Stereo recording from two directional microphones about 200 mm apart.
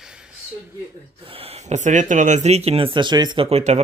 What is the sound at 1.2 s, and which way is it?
Speech, 30° right (ahead or behind).